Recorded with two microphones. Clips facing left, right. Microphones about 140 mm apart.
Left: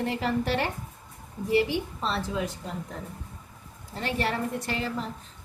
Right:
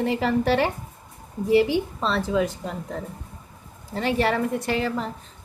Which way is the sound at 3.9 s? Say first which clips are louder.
Right 6 dB; 90° right.